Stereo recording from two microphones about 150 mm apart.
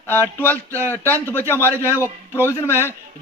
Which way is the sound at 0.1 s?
15° left (ahead or behind).